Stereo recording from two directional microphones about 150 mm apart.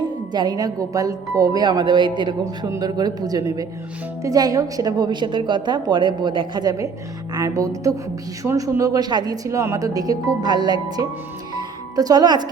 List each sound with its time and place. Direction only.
0.3 s a woman's voice: 25° right (ahead or behind)
11.5 s music: 25° right (ahead or behind)